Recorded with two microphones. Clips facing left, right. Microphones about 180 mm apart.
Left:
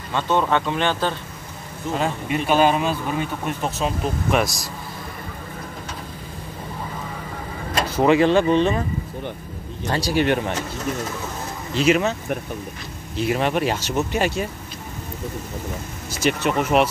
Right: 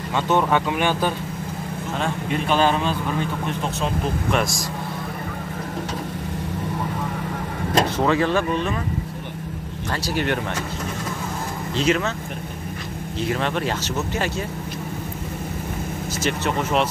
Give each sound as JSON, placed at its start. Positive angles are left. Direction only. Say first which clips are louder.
{"t": 0.1, "sound": "speech", "louder": "even", "side_deg": -15}
{"t": 2.0, "sound": "speech", "louder": "left 2 dB", "side_deg": 5}
{"t": 8.0, "sound": "speech", "louder": "left 9 dB", "side_deg": 15}
{"t": 9.8, "sound": "speech", "louder": "left 4 dB", "side_deg": 15}
{"t": 11.7, "sound": "speech", "louder": "left 3 dB", "side_deg": 10}
{"t": 13.3, "sound": "speech", "louder": "left 3 dB", "side_deg": 10}
{"t": 16.2, "sound": "speech", "louder": "left 4 dB", "side_deg": 15}